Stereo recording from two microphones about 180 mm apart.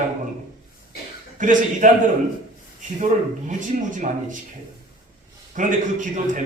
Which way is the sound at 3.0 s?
45° right (ahead or behind).